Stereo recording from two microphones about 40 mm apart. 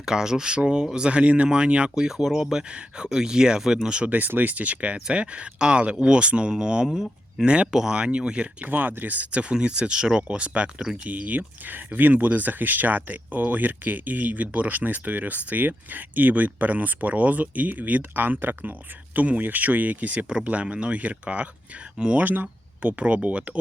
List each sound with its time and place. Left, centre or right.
0.0 s speech: centre
2.0 s speech: centre
2.7 s speech: right
3.6 s speech: centre
4.0 s speech: right
7.7 s speech: centre
7.9 s speech: right
8.6 s speech: right
10.2 s speech: right
22.1 s speech: right
23.0 s speech: right